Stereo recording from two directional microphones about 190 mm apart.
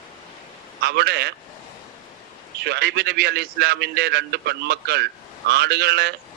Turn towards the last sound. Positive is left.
turn(degrees=-60)  # may be behind; listen again after turning